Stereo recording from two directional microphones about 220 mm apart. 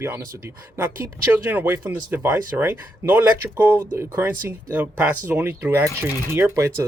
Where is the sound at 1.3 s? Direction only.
10° right (ahead or behind).